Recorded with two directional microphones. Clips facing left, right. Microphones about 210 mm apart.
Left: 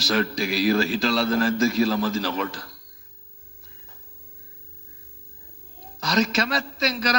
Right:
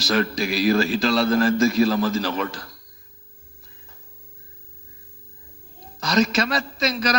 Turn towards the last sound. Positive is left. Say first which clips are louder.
# right 2 dB
turn(degrees=-50)  # may be behind; listen again after turning